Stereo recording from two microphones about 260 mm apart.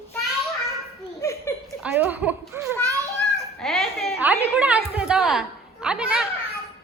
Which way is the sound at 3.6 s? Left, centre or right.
Centre.